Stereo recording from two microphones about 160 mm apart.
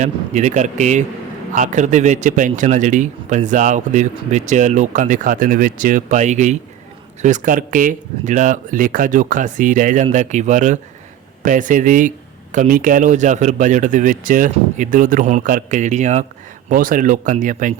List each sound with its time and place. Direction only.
0.0 s a man's voice: 45° right (ahead or behind)
16.6 s speech: 60° right (ahead or behind)